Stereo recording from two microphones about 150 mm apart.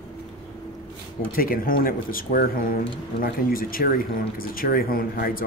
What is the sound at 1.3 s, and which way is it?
Speech, 75° left (ahead or behind).